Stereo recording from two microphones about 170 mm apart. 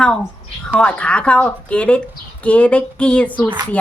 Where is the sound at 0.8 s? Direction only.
5° left (ahead or behind).